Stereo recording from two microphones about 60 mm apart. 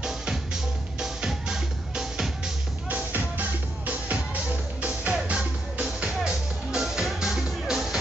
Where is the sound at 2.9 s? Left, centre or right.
Right.